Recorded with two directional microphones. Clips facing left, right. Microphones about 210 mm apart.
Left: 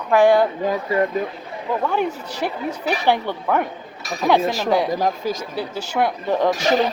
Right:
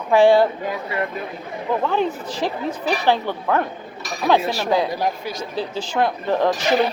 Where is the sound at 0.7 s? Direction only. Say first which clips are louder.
Left 5 dB; 40° left (ahead or behind).